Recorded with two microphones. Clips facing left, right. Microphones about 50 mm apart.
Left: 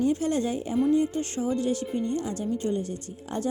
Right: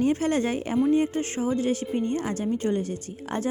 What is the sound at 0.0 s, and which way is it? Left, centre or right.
A woman's voice, right.